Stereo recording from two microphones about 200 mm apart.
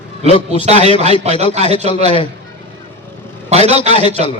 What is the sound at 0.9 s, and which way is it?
A man's voice, 25° left (ahead or behind).